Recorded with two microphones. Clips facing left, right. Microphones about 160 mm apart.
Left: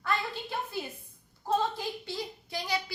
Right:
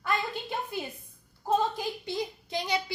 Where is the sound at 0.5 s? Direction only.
20° right (ahead or behind).